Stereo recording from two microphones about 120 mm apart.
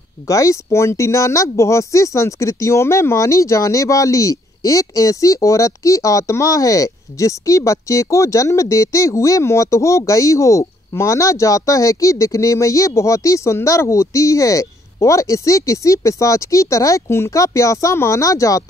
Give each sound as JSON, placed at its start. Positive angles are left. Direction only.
{"t": 0.3, "sound": "speech", "side_deg": 25}